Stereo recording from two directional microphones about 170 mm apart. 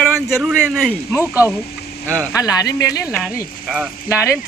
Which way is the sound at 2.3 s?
20° left (ahead or behind).